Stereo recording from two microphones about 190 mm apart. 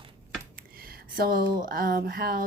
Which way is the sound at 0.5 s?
50° right (ahead or behind).